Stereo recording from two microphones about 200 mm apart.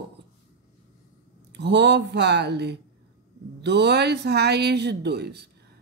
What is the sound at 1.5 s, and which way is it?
Speech, 60° right (ahead or behind).